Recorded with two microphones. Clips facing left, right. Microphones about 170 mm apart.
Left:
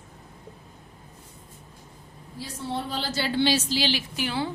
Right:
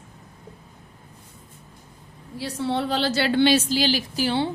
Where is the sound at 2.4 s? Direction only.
70° right (ahead or behind).